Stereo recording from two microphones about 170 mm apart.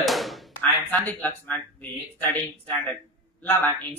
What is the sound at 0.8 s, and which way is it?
Speech, 10° left (ahead or behind).